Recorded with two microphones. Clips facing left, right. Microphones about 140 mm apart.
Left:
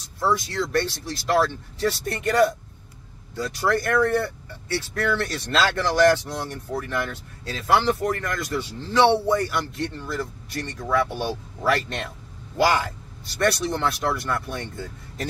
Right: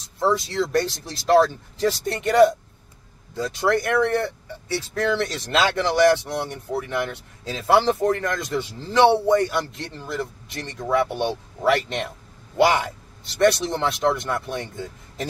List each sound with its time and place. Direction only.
0.2 s speech: 25° right (ahead or behind)
7.6 s speech: 25° right (ahead or behind)